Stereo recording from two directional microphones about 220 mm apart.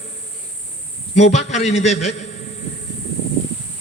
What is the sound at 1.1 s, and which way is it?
A man's voice, 30° left (ahead or behind).